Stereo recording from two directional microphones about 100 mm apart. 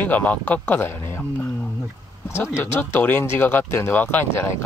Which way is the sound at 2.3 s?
25° left (ahead or behind).